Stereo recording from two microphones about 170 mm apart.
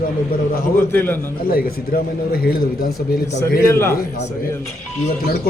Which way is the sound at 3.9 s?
60° left (ahead or behind).